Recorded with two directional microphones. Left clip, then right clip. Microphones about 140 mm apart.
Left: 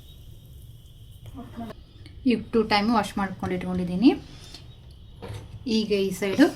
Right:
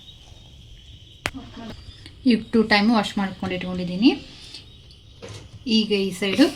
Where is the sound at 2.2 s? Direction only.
35° right (ahead or behind); by 4.1 s 15° right (ahead or behind).